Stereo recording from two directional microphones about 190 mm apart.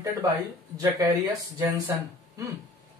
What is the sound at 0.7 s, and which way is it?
Speech, 15° right (ahead or behind).